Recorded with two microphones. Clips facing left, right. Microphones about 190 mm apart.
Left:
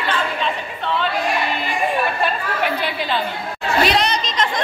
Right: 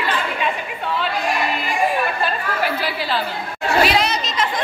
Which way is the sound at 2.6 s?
5° right (ahead or behind).